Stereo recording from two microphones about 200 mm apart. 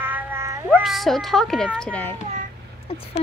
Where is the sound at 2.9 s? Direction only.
30° left (ahead or behind).